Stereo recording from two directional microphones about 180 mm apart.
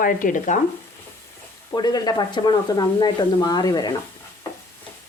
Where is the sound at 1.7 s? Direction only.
25° left (ahead or behind).